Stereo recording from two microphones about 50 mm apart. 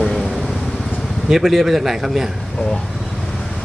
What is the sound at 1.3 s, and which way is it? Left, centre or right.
Speech, centre.